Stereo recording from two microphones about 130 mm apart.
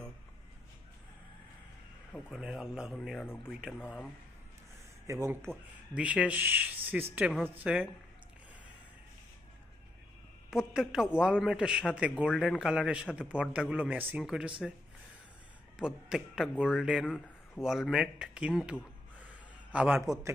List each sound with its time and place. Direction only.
2.1 s a man's voice: 5° right (ahead or behind)
5.0 s speech: 25° right (ahead or behind)
5.9 s a man's voice: 10° right (ahead or behind)
10.5 s a man's voice: 5° right (ahead or behind)
15.7 s a man's voice: 5° right (ahead or behind)